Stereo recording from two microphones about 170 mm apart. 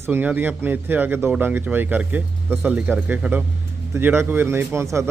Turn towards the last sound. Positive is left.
turn(degrees=-15)  # may be behind; listen again after turning